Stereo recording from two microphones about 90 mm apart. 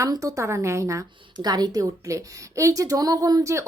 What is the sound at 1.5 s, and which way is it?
Speech, 50° right (ahead or behind).